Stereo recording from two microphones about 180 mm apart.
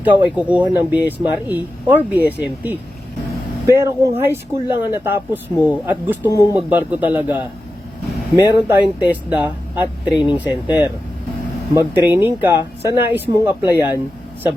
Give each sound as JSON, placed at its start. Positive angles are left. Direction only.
{"t": 0.0, "sound": "speech", "side_deg": -10}
{"t": 3.8, "sound": "speech", "side_deg": -15}
{"t": 10.1, "sound": "speech", "side_deg": 25}
{"t": 10.3, "sound": "speech", "side_deg": -10}